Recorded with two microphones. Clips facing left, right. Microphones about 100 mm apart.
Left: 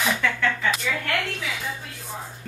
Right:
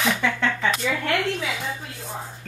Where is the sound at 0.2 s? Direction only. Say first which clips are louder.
Right 1 dB; 20° right (ahead or behind).